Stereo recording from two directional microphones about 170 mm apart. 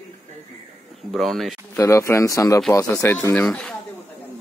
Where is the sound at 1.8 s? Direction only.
15° left (ahead or behind).